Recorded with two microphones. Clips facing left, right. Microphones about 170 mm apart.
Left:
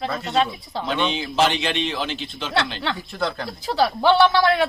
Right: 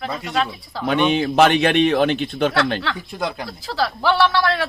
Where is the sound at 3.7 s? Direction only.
20° left (ahead or behind).